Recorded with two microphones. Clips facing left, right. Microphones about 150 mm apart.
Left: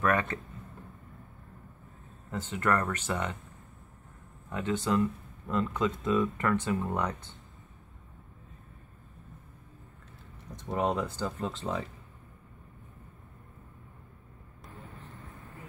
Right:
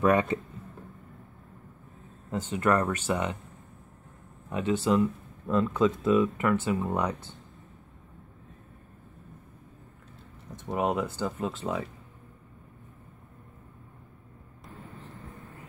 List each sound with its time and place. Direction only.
0.0 s speech: 20° right (ahead or behind)
2.3 s speech: 15° right (ahead or behind)
4.5 s speech: 15° right (ahead or behind)
10.7 s speech: 15° right (ahead or behind)